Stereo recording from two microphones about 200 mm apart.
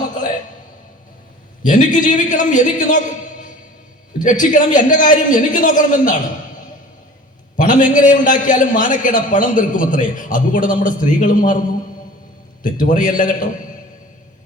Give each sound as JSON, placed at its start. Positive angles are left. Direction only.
{"t": 1.6, "sound": "a man's voice", "side_deg": 40}
{"t": 4.2, "sound": "a man's voice", "side_deg": 40}
{"t": 7.5, "sound": "a man's voice", "side_deg": 40}
{"t": 12.6, "sound": "a man's voice", "side_deg": 40}